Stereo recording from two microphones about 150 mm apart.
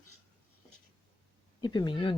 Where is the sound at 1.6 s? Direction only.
30° left (ahead or behind).